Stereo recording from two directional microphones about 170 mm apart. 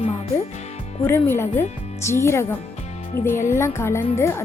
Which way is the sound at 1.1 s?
15° left (ahead or behind).